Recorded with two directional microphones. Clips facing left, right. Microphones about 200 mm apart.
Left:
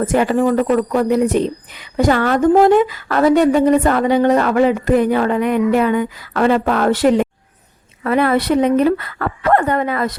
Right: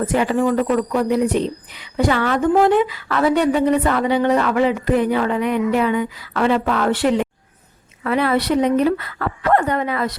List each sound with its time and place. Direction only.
0.0 s a woman's voice: 45° left (ahead or behind)